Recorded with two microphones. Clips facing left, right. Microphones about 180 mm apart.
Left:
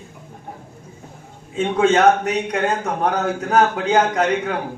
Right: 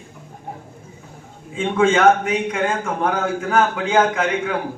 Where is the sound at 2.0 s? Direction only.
40° left (ahead or behind).